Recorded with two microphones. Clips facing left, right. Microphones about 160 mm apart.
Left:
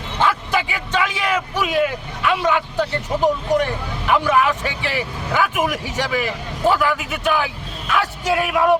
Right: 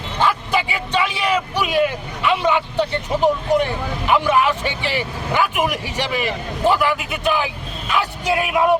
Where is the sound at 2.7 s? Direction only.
20° right (ahead or behind).